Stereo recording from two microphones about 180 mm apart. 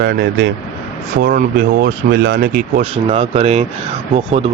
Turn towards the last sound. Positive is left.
turn(degrees=-35)  # may be behind; listen again after turning